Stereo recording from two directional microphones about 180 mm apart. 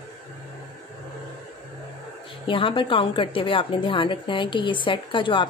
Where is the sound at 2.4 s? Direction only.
30° left (ahead or behind).